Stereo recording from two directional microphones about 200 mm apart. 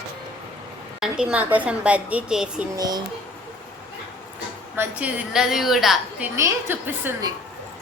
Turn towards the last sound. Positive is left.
turn(degrees=-10)  # may be behind; listen again after turning